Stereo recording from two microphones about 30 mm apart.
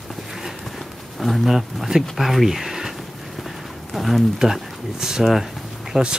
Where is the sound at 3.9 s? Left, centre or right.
Centre.